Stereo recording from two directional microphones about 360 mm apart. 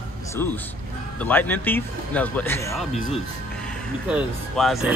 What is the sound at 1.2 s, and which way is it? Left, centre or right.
Speech, centre.